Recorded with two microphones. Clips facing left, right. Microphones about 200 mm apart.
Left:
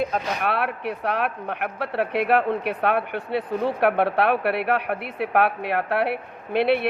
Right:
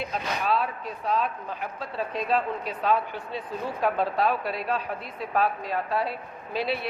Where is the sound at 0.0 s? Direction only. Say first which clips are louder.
Left 5 dB; 60° left (ahead or behind).